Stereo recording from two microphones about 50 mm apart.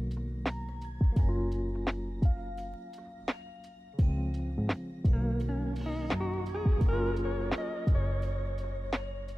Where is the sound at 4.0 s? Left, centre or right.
Centre.